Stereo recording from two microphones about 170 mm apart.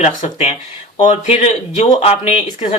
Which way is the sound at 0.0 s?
40° left (ahead or behind).